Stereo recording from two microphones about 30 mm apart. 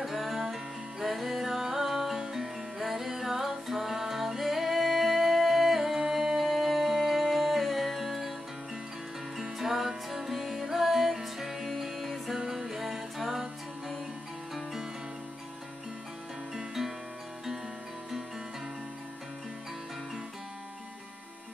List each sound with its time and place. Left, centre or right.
0.0 s music: centre
9.4 s music: centre
16.5 s music: centre